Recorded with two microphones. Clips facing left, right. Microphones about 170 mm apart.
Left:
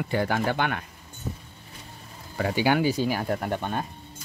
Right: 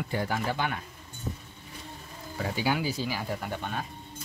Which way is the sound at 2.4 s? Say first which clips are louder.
Left 6 dB; 70° left (ahead or behind).